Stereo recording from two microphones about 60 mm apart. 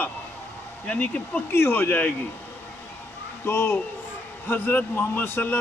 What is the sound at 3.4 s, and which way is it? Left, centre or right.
A man's voice, left.